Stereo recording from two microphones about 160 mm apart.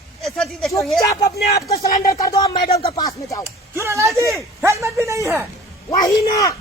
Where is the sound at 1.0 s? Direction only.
20° left (ahead or behind).